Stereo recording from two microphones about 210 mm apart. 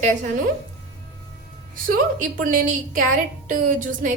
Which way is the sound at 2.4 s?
40° right (ahead or behind).